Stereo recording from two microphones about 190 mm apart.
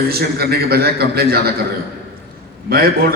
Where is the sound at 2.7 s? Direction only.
50° right (ahead or behind).